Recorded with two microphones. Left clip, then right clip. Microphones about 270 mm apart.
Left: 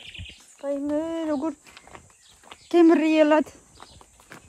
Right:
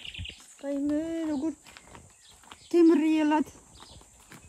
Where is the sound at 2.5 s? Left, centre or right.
Centre.